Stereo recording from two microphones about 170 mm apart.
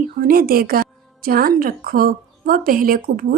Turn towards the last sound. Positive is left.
turn(degrees=-55)  # may be behind; listen again after turning